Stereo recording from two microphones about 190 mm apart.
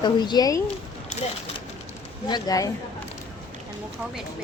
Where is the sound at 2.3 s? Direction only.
20° left (ahead or behind).